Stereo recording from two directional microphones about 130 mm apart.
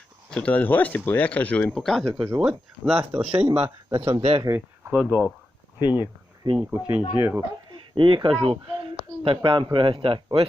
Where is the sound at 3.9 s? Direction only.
50° right (ahead or behind).